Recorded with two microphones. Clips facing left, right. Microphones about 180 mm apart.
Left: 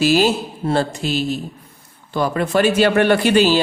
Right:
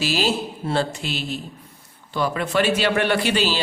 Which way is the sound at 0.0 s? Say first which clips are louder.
Left 7 dB; 50° left (ahead or behind).